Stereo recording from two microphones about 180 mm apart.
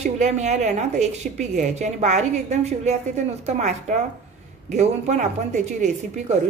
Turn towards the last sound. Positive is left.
turn(degrees=-40)  # may be behind; listen again after turning